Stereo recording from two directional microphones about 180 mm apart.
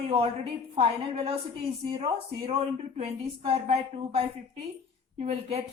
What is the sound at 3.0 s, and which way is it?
A woman's voice, 35° right (ahead or behind).